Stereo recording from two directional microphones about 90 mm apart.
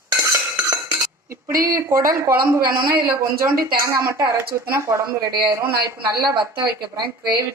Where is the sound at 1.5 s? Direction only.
45° right (ahead or behind).